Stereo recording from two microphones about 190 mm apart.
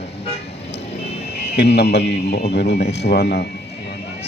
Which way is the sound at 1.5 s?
60° left (ahead or behind).